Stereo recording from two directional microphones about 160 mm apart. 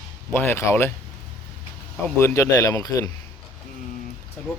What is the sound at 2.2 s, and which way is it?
Speech, 15° left (ahead or behind).